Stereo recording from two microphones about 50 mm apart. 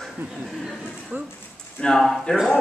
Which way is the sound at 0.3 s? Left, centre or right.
Centre.